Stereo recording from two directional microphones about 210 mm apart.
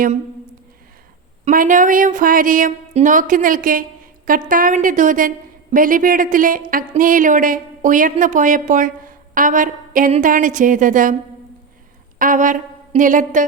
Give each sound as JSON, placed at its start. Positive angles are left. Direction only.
{"t": 1.5, "sound": "speech", "side_deg": -40}
{"t": 12.2, "sound": "a woman's voice", "side_deg": -40}